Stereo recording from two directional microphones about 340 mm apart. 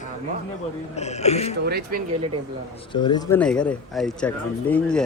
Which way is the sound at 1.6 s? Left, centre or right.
Right.